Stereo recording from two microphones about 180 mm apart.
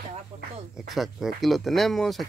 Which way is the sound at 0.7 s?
Centre (ahead or behind).